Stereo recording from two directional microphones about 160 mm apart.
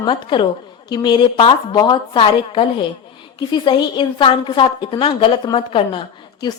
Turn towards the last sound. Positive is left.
turn(degrees=30)  # may be behind; listen again after turning